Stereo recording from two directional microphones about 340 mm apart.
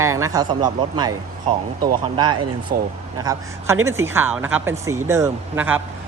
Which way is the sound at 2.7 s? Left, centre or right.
Right.